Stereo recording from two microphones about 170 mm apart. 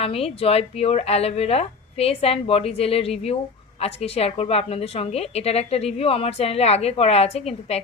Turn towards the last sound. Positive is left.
turn(degrees=40)  # may be behind; listen again after turning